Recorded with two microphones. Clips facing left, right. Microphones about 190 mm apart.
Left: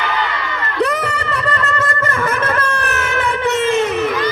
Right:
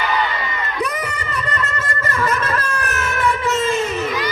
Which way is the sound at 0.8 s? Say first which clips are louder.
Left 8 dB; 70° left (ahead or behind).